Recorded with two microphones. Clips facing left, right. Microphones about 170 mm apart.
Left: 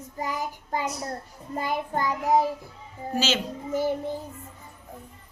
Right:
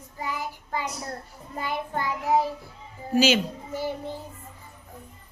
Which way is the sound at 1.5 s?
40° left (ahead or behind).